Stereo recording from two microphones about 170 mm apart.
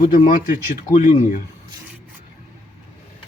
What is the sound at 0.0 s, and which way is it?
Speech, 50° left (ahead or behind).